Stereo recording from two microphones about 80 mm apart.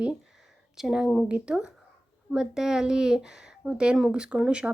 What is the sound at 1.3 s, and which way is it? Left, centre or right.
Speech, centre.